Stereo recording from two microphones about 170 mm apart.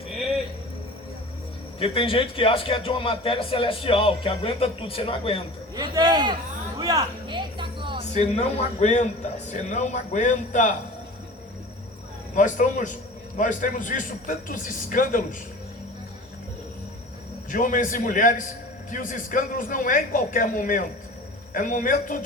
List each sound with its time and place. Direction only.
1.8 s a man's voice: 30° left (ahead or behind)
5.7 s a man's voice: 25° right (ahead or behind)
6.7 s a sound: 20° right (ahead or behind)
8.1 s a man's voice: 40° left (ahead or behind)
12.3 s a man's voice: 50° left (ahead or behind)
17.5 s a man's voice: 50° left (ahead or behind)